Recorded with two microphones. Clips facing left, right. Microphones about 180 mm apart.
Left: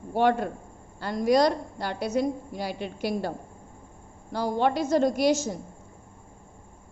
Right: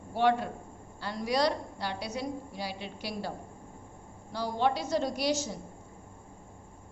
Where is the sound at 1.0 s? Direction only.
45° left (ahead or behind).